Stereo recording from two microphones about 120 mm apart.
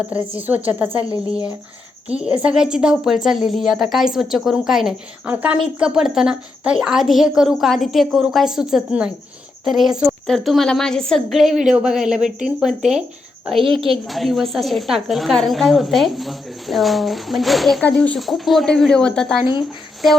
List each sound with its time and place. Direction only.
0.1 s speech: 10° right (ahead or behind)
2.0 s a woman's voice: 10° right (ahead or behind)
13.7 s a woman's voice: 50° right (ahead or behind)
13.9 s a woman's voice: centre (ahead or behind)